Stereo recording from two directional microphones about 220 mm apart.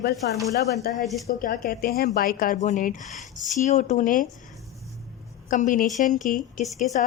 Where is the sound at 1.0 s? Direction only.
Centre (ahead or behind).